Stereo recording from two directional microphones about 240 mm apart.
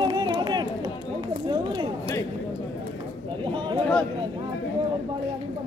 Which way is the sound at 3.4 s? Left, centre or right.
Centre.